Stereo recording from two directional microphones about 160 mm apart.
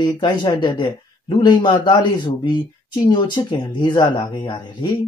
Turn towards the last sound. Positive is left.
turn(degrees=30)  # may be behind; listen again after turning